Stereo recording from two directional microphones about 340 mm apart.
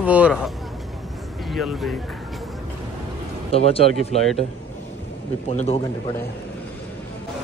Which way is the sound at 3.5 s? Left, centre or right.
Centre.